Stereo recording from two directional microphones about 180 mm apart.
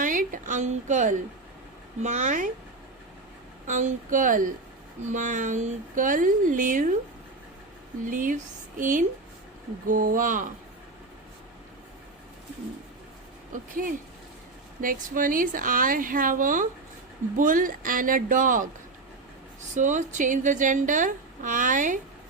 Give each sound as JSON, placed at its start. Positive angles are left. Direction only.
{"t": 0.0, "sound": "a sound", "side_deg": -50}
{"t": 2.0, "sound": "speech", "side_deg": -40}
{"t": 3.7, "sound": "a woman's voice", "side_deg": -40}
{"t": 8.1, "sound": "a woman's voice", "side_deg": -45}
{"t": 13.5, "sound": "a woman's voice", "side_deg": -50}
{"t": 19.7, "sound": "a woman's voice", "side_deg": -45}